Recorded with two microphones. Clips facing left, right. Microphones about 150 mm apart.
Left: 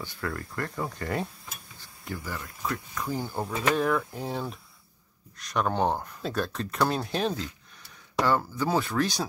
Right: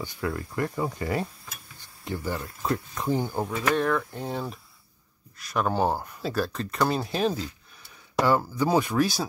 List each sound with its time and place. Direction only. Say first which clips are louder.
0.0 s cutlery: right 3 dB; 15° right (ahead or behind)
1.8 s speech: right 5 dB; 25° right (ahead or behind)
3.7 s speech: right 2 dB; 5° left (ahead or behind)
8.2 s cutlery: right 3 dB; 10° right (ahead or behind)